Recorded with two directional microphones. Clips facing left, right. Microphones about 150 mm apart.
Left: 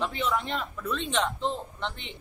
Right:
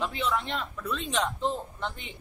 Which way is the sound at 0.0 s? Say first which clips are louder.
Left 1 dB; centre (ahead or behind).